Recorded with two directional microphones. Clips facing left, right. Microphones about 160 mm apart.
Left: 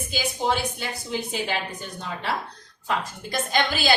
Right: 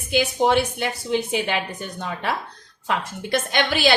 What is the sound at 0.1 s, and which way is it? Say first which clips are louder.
A woman's voice: right 7 dB; 65° right (ahead or behind).